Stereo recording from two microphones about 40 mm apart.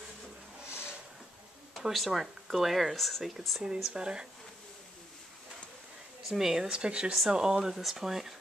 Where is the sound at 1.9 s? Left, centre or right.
Centre.